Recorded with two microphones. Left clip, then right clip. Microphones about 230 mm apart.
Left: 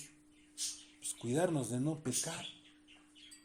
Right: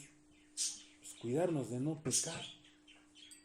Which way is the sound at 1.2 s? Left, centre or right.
Left.